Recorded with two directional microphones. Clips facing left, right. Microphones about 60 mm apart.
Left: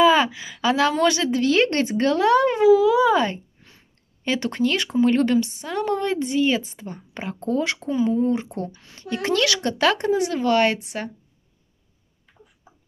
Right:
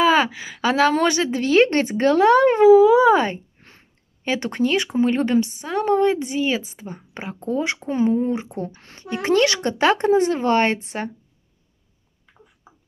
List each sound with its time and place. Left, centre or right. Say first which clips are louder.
0.0 s a woman's voice: left 1 dB; right
3.6 s a sound: right 3 dB; right
4.2 s a woman's voice: right 1 dB; right
8.7 s speech: right 2 dB; right
9.0 s a woman's voice: right 4 dB; right